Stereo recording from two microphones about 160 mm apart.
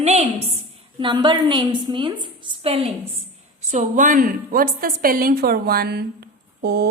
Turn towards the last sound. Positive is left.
turn(degrees=-90)